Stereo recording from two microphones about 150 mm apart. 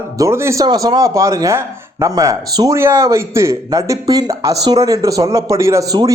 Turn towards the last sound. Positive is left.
turn(degrees=-25)  # may be behind; listen again after turning